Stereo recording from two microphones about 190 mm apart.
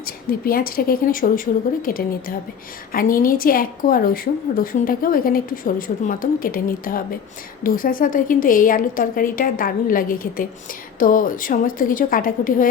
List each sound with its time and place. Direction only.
0.0 s a woman's voice: 50° left (ahead or behind)